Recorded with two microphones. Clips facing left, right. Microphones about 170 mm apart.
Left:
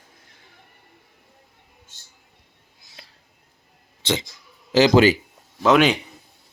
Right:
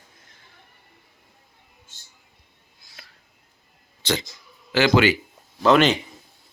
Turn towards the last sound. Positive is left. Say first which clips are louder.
# even
turn(degrees=10)  # may be behind; listen again after turning